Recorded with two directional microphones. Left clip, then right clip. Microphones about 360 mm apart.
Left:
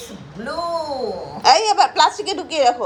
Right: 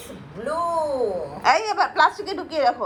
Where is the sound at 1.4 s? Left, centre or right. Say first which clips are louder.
Left 6 dB; centre.